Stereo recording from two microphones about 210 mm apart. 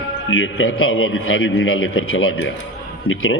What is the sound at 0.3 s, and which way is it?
A man's voice, 75° left (ahead or behind).